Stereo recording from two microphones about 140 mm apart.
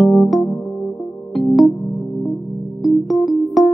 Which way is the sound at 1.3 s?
Centre (ahead or behind).